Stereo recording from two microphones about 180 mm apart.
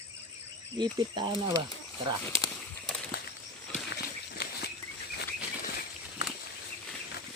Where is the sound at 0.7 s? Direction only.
25° right (ahead or behind).